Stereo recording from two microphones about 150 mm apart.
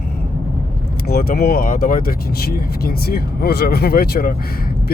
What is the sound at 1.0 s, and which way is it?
Speech, 90° left.